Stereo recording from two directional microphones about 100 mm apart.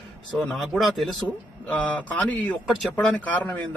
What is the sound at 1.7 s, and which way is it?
Speech, 15° left (ahead or behind).